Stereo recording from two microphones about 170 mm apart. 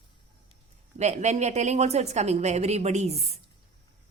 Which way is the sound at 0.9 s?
40° right (ahead or behind).